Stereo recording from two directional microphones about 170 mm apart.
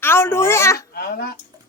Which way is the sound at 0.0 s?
15° left (ahead or behind).